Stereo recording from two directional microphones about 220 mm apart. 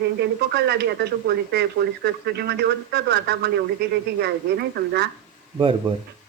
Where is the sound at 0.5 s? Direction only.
50° right (ahead or behind).